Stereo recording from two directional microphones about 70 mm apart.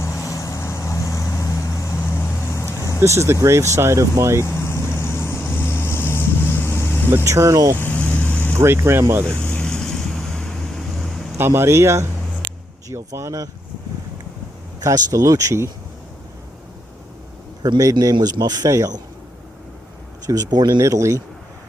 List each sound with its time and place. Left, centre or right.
0.0 s vehicle: left
3.0 s speech: right
4.4 s vehicle: left
7.3 s speech: right
7.8 s vehicle: left
8.5 s speech: right
9.5 s vehicle: centre
11.3 s speech: right
14.8 s speech: right
17.6 s speech: right
18.7 s speech: right
20.2 s speech: right
20.8 s speech: right